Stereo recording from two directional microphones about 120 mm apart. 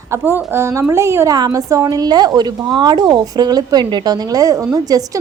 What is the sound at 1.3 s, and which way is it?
A woman's voice, 35° right (ahead or behind).